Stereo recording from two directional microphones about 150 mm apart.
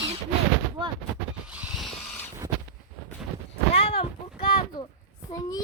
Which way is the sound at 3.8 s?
40° left (ahead or behind).